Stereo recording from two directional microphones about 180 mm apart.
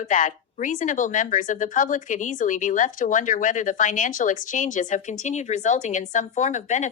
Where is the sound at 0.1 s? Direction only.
45° left (ahead or behind).